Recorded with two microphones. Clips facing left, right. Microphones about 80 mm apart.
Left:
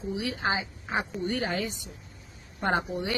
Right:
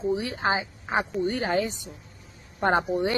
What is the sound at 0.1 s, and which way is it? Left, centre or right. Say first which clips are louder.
Speech: right 1 dB; right.